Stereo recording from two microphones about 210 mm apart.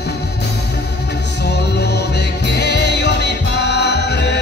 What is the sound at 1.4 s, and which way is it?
Music, 55° left (ahead or behind).